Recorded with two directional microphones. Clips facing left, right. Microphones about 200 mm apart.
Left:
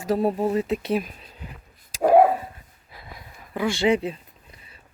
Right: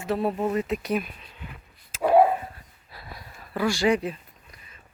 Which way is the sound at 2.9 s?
15° left (ahead or behind).